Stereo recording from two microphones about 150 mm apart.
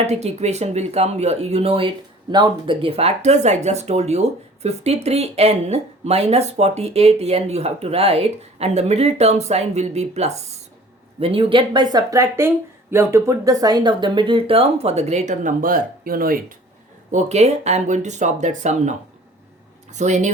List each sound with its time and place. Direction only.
0.0 s speech: 45° right (ahead or behind); by 16.4 s 75° right (ahead or behind)
17.1 s speech: 50° right (ahead or behind)